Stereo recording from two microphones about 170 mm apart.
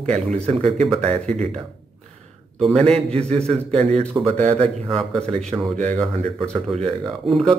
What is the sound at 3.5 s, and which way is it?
Speech, 40° right (ahead or behind).